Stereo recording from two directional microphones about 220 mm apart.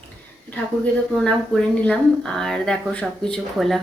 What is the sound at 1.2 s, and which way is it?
Speech, 5° left (ahead or behind).